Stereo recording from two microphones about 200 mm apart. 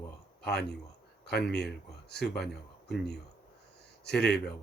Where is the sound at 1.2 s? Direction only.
55° left (ahead or behind).